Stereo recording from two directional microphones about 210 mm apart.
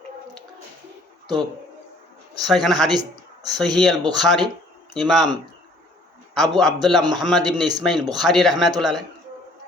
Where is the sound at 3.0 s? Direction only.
20° right (ahead or behind).